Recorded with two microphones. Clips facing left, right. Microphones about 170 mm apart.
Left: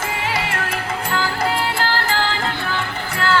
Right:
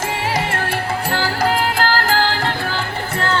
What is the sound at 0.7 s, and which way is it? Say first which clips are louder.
Music: right 3 dB; 35° right (ahead or behind).